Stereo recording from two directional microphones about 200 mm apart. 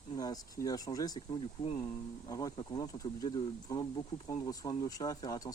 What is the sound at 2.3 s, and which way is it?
Speech, 20° left (ahead or behind).